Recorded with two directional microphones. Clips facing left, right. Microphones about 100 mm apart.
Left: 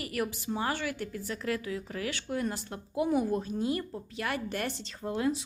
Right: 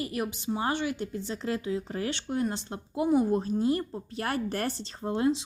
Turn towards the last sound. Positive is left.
turn(degrees=-25)  # may be behind; listen again after turning